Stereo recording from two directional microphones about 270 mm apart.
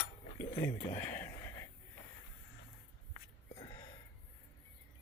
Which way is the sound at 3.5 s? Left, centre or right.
Centre.